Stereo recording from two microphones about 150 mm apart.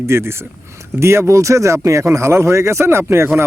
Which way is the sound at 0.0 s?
15° right (ahead or behind).